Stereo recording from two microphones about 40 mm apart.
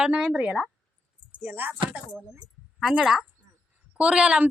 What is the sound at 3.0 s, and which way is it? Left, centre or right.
Speech, centre.